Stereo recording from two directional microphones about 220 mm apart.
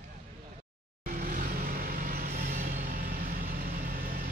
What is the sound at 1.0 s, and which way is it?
Vehicle, 40° right (ahead or behind).